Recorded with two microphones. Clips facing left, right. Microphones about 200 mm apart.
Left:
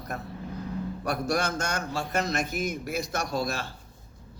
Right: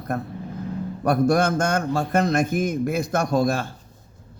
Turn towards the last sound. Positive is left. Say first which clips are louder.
# right 9 dB
turn(degrees=-50)  # may be behind; listen again after turning